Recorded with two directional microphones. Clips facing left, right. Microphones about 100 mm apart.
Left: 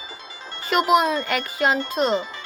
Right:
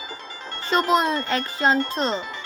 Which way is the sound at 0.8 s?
10° left (ahead or behind).